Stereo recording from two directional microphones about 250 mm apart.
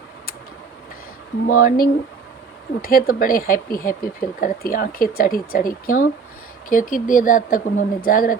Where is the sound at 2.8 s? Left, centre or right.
Left.